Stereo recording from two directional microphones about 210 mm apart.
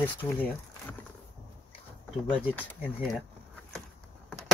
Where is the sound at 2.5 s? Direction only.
5° left (ahead or behind).